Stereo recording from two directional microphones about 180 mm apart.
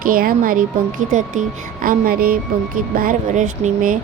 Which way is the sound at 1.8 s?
55° right (ahead or behind).